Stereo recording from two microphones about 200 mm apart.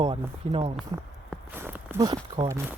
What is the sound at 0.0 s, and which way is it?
Speech, 25° right (ahead or behind).